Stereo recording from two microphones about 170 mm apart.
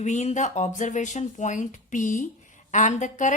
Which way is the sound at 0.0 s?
45° left (ahead or behind).